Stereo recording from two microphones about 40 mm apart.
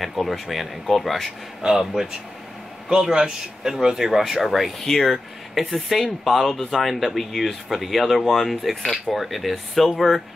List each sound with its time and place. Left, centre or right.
0.0 s speech: centre
1.6 s speech: centre
2.9 s a man's voice: centre